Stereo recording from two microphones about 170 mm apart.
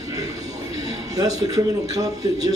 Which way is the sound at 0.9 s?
20° right (ahead or behind).